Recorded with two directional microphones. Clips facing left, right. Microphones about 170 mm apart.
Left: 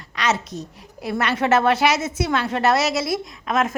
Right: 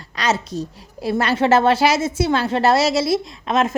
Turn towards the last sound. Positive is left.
turn(degrees=-30)  # may be behind; listen again after turning